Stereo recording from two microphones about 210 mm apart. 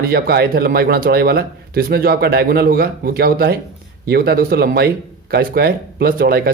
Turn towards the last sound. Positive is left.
turn(degrees=-45)  # may be behind; listen again after turning